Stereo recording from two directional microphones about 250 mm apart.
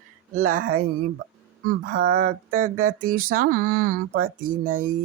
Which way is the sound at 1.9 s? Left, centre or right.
Right.